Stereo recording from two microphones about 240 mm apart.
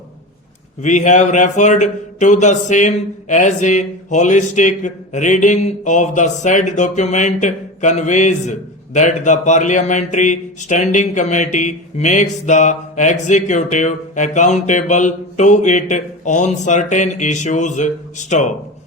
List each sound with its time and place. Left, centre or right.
0.8 s a man's voice: left